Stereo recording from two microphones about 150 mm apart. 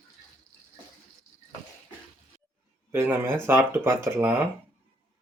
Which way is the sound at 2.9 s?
15° right (ahead or behind).